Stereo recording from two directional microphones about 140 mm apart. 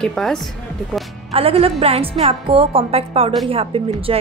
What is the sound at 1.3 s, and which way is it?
A woman's voice, 45° right (ahead or behind).